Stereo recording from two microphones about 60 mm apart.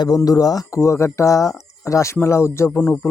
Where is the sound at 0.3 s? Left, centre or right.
Left.